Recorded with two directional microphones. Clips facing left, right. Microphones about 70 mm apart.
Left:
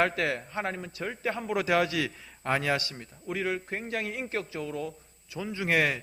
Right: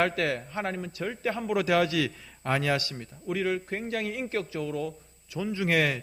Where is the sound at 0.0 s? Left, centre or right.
Left.